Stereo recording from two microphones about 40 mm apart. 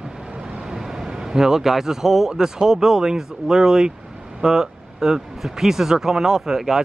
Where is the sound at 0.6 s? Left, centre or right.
Centre.